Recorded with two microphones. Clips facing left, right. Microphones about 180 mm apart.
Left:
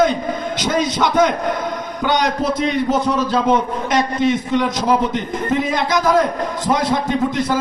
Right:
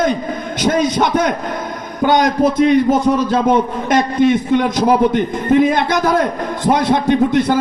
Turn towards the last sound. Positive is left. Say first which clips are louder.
# right 5 dB
turn(degrees=-60)  # may be behind; listen again after turning